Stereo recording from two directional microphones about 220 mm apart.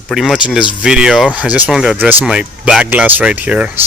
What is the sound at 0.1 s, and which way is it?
Speech, centre (ahead or behind).